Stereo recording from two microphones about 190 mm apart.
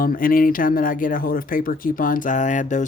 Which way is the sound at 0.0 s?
50° left (ahead or behind).